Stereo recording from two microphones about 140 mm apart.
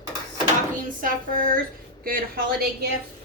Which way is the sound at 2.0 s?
90° right.